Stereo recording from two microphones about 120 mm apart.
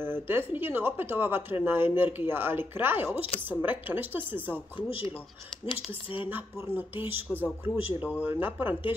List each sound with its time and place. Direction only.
0.0 s speech: 20° right (ahead or behind)
6.2 s speech: 15° right (ahead or behind)